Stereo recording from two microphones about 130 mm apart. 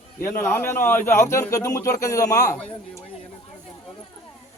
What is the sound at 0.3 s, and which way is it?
Speech, 15° left (ahead or behind).